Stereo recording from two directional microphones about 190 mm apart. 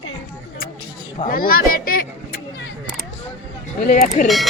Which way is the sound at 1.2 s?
50° left (ahead or behind).